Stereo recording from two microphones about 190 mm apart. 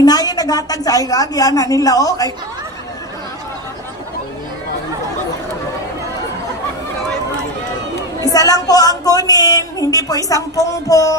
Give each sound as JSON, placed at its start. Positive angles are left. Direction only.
{"t": 0.0, "sound": "speech", "side_deg": 20}
{"t": 8.2, "sound": "speech", "side_deg": 20}